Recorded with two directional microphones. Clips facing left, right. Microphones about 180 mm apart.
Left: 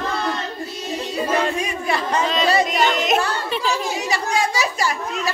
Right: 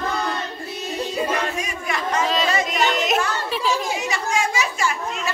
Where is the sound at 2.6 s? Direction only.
Centre (ahead or behind).